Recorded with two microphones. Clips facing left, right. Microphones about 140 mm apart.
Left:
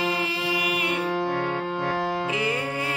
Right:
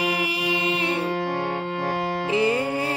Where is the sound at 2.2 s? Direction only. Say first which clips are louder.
Right 5 dB; 30° right (ahead or behind).